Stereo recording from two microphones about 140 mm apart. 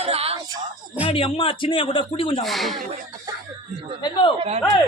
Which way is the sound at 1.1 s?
40° left (ahead or behind).